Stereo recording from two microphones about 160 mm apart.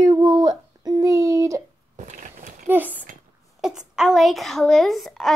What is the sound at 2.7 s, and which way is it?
Speech, 10° right (ahead or behind).